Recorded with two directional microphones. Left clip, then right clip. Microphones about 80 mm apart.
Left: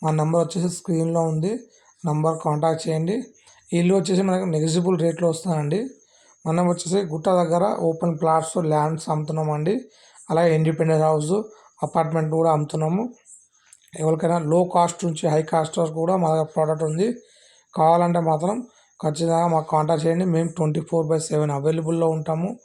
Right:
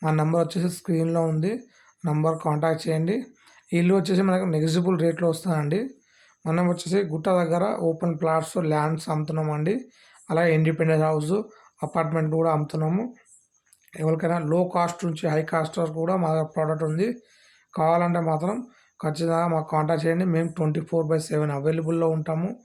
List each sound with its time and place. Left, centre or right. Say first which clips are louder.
0.1 s speech: left 2 dB; left
12.0 s speech: left 2 dB; left
12.4 s speech: left 5 dB; left
22.1 s speech: left 3 dB; left